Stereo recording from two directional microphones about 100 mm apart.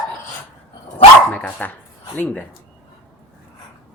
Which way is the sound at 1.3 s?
15° left (ahead or behind).